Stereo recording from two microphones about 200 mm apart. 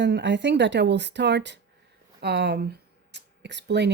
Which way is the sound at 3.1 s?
60° right (ahead or behind).